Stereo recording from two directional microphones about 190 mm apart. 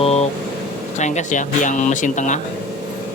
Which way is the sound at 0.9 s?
40° left (ahead or behind).